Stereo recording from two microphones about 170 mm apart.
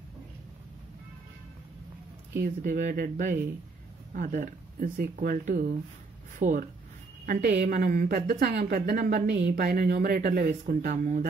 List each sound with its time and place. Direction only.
2.4 s a woman's voice: 55° right (ahead or behind)
7.2 s a woman's voice: 55° right (ahead or behind)